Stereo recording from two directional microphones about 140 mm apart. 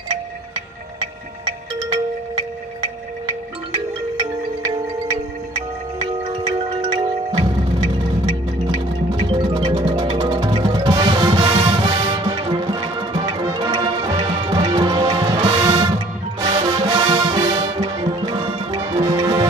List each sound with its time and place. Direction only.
6.9 s music: 35° right (ahead or behind)
9.1 s music: 35° right (ahead or behind)